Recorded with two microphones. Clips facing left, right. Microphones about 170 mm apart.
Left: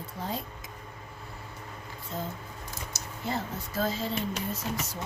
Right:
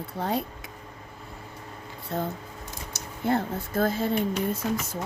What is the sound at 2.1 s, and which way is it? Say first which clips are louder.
A woman's voice: right 6 dB; 65° right (ahead or behind).